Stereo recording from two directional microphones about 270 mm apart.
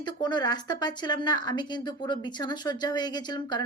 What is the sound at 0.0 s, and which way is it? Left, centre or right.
A woman's voice, centre.